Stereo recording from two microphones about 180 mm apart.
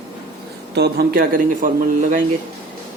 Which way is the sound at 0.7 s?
65° right (ahead or behind).